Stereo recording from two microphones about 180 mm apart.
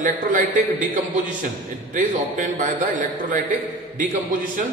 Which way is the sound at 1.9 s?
45° right (ahead or behind).